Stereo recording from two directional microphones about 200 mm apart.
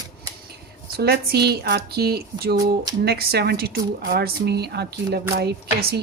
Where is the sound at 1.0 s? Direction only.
55° right (ahead or behind).